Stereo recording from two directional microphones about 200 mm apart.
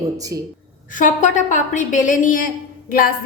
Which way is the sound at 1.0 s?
40° left (ahead or behind).